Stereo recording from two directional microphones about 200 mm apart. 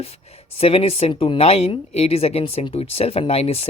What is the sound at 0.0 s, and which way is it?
Speech, 30° left (ahead or behind).